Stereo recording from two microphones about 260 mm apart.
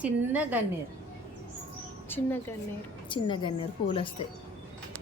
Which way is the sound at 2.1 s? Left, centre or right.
Centre.